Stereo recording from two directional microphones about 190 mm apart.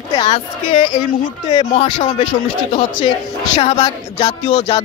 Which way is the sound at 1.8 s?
30° left (ahead or behind).